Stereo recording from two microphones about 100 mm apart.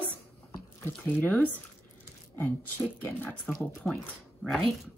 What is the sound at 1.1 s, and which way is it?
Speech, 15° left (ahead or behind).